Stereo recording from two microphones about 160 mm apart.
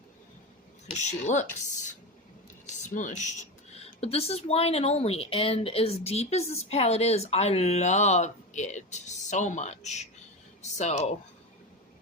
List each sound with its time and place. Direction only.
0.9 s speech: 45° left (ahead or behind)